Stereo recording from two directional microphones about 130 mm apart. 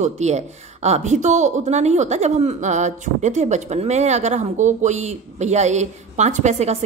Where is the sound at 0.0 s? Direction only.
60° right (ahead or behind).